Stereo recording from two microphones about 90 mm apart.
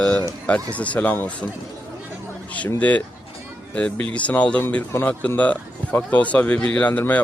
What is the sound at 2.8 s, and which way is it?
Speech, 15° left (ahead or behind).